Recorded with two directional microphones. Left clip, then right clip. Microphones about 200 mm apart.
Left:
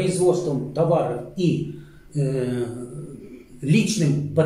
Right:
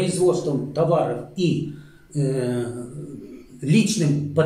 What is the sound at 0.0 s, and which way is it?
Speech, 15° right (ahead or behind).